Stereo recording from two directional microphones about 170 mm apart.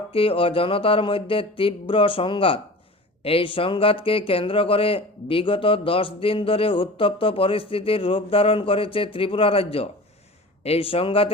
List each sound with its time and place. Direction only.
0.1 s speech: 30° left (ahead or behind)